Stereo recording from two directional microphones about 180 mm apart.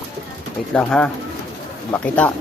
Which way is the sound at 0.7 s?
5° left (ahead or behind).